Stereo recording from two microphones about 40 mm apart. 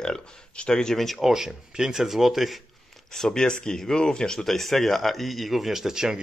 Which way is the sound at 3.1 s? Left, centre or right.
Centre.